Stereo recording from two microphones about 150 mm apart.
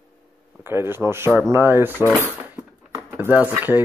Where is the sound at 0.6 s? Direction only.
15° right (ahead or behind).